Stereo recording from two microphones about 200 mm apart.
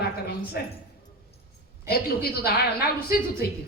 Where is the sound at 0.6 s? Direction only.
50° left (ahead or behind).